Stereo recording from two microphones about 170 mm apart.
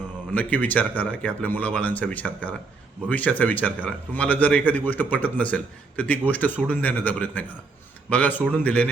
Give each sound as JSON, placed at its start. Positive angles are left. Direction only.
{"t": 0.3, "sound": "a man's voice", "side_deg": 10}